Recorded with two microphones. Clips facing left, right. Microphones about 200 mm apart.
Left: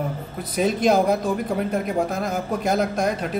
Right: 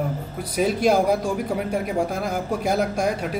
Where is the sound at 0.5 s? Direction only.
10° right (ahead or behind).